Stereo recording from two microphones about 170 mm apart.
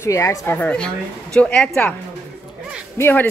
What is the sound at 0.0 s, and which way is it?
A woman's voice, 15° left (ahead or behind).